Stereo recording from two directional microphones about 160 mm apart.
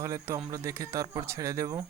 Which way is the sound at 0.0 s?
20° right (ahead or behind).